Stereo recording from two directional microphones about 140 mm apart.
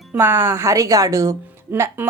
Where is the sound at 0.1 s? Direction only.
15° right (ahead or behind).